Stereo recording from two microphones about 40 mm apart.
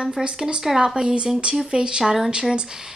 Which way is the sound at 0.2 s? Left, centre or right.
Right.